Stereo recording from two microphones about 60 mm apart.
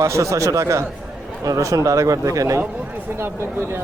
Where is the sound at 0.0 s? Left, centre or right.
Right.